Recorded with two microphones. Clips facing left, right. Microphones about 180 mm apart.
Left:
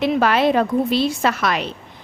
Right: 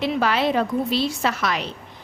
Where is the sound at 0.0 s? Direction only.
55° left (ahead or behind).